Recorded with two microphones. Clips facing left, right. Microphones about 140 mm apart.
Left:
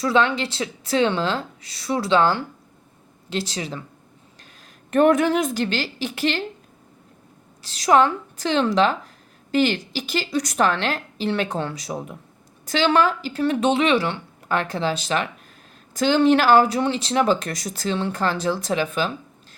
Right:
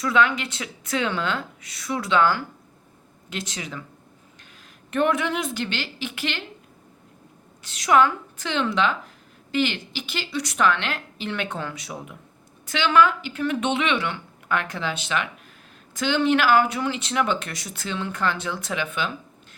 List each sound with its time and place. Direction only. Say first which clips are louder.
0.0 s speech: left 2 dB; 30° left (ahead or behind)
4.9 s speech: left 6 dB; 45° left (ahead or behind)
7.6 s speech: left 2 dB; 35° left (ahead or behind)